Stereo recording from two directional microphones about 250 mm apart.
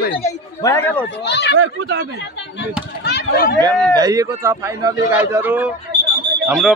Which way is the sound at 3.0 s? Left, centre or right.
Left.